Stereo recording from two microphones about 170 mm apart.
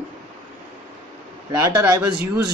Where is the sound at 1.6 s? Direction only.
20° right (ahead or behind).